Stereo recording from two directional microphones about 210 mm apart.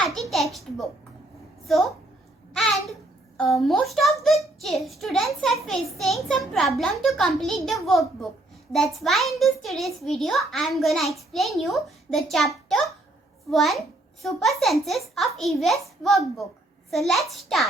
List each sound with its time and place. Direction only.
0.0 s a child's voice: centre (ahead or behind)
3.3 s a child's voice: centre (ahead or behind)
12.6 s a sound: centre (ahead or behind)
13.5 s a child's voice: centre (ahead or behind)